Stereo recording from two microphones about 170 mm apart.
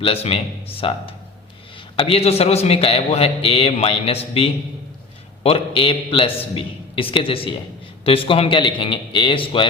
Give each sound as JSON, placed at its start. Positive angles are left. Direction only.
{"t": 0.0, "sound": "a man's voice", "side_deg": 35}